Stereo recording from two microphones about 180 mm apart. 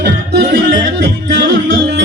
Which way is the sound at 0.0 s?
70° right (ahead or behind).